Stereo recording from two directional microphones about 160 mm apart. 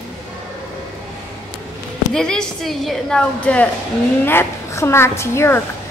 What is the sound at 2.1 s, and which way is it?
A woman's voice, 5° left (ahead or behind).